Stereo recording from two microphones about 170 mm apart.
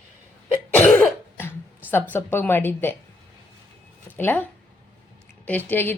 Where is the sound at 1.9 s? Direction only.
15° left (ahead or behind).